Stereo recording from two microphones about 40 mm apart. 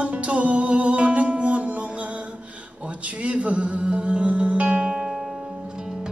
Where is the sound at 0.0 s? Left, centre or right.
Right.